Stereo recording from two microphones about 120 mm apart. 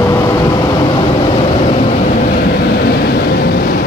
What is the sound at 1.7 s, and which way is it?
Vehicle, 90° left.